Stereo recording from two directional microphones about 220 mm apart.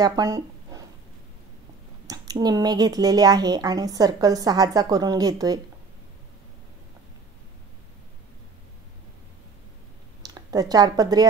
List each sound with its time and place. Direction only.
0.0 s speech: 15° right (ahead or behind)
2.0 s speech: 20° right (ahead or behind)
10.2 s speech: 15° right (ahead or behind)